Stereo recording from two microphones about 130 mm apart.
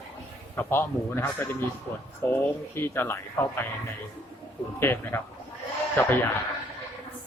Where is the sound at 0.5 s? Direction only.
20° left (ahead or behind).